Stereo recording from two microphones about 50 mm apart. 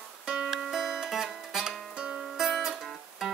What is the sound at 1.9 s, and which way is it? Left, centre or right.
Music, centre.